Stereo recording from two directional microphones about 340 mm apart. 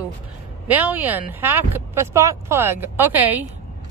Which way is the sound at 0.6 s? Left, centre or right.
Centre.